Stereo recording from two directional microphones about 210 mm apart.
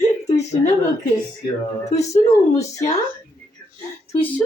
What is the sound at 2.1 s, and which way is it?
Speech, 30° left (ahead or behind).